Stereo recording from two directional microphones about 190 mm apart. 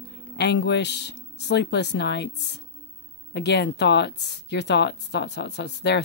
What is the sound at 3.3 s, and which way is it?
Speech, 60° left (ahead or behind).